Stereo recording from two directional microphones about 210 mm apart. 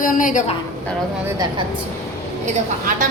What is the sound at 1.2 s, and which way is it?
Speech, 10° right (ahead or behind).